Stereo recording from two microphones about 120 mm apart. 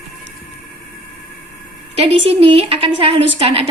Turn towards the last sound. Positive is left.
turn(degrees=-55)  # may be behind; listen again after turning